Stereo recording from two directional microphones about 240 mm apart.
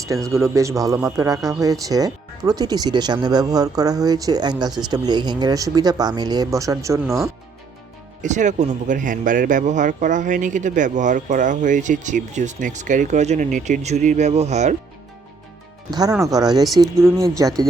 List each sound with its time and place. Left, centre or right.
0.3 s speech: centre
8.2 s a man's voice: right
16.0 s speech: centre